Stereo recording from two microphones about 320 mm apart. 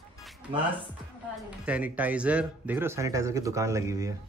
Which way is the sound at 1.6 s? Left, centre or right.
Centre.